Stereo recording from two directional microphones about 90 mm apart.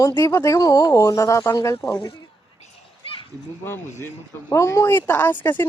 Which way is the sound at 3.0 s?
85° left.